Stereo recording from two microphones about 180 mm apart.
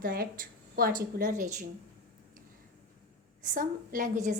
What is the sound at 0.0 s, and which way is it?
A woman's voice, 55° right (ahead or behind).